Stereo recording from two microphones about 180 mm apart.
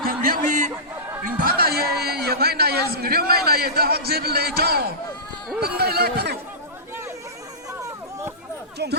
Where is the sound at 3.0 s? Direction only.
60° right (ahead or behind).